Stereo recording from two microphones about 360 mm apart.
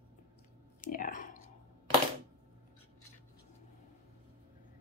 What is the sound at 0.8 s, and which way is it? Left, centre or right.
Clicking, left.